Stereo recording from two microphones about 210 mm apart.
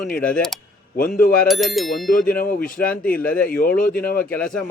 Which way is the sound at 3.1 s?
5° left (ahead or behind).